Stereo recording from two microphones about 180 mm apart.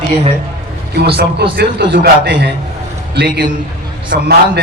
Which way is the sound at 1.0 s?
65° right (ahead or behind).